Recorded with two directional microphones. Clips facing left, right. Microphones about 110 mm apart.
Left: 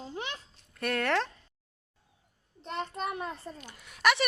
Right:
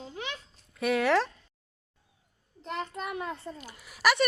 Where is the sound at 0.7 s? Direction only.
5° right (ahead or behind).